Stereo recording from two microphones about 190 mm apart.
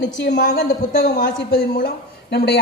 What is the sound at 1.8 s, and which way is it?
Speech, 55° left (ahead or behind).